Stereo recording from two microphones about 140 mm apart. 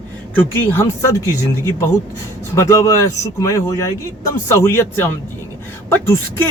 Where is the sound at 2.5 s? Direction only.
20° left (ahead or behind).